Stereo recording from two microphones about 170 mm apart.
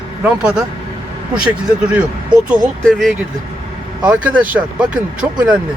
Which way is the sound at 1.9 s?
10° right (ahead or behind).